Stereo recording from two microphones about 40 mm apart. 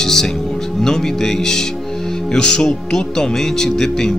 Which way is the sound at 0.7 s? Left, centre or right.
Centre.